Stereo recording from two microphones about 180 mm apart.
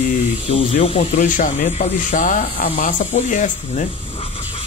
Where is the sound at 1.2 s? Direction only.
45° left (ahead or behind).